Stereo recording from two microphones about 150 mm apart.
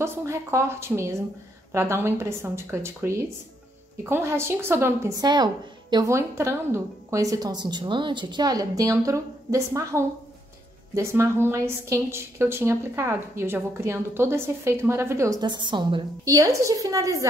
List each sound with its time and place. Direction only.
0.0 s a woman's voice: 20° right (ahead or behind)